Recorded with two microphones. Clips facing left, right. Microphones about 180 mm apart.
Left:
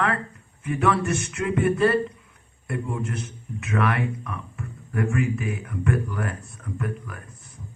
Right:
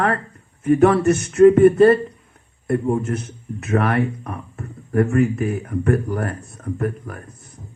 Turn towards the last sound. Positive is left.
turn(degrees=-40)  # may be behind; listen again after turning